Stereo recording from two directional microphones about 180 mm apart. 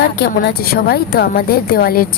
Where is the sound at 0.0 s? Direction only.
65° left (ahead or behind).